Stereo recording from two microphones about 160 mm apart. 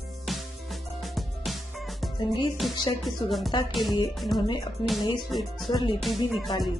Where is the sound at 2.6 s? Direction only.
Centre (ahead or behind).